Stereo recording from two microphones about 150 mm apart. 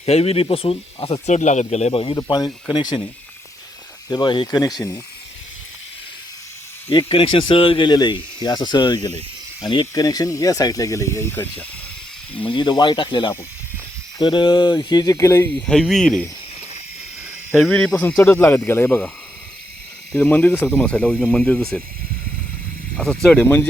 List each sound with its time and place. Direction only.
0.0 s speech: 40° left (ahead or behind)
2.1 s speech: 25° left (ahead or behind)
4.1 s speech: 30° left (ahead or behind)
6.9 s speech: 35° left (ahead or behind); by 11.6 s 15° left (ahead or behind)
12.4 s speech: 30° left (ahead or behind)
15.5 s speech: 5° left (ahead or behind)
17.7 s speech: 5° left (ahead or behind)
18.2 s speech: 15° left (ahead or behind)
20.1 s speech: 10° left (ahead or behind)
23.0 s speech: 5° left (ahead or behind)